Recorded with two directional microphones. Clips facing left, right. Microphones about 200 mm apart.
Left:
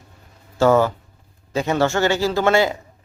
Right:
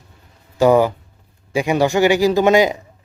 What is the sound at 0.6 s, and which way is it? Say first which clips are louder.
A man's voice: right 2 dB; 15° right (ahead or behind).